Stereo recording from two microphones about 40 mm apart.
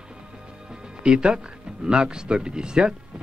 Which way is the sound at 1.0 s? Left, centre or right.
Right.